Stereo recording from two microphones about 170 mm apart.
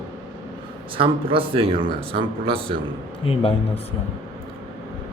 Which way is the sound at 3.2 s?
35° left (ahead or behind).